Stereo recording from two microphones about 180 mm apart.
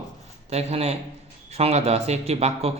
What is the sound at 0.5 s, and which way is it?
A man's voice, 35° right (ahead or behind).